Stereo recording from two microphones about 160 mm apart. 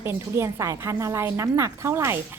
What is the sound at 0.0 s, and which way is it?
A woman's voice, 15° right (ahead or behind).